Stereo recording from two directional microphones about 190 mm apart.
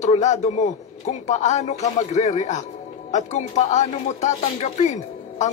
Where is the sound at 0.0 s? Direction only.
35° left (ahead or behind).